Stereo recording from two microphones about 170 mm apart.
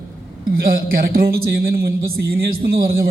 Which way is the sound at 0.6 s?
60° right (ahead or behind).